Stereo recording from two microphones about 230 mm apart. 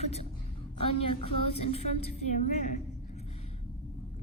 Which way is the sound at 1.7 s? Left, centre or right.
Left.